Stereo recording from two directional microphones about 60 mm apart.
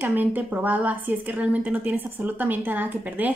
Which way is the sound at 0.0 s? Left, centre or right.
Right.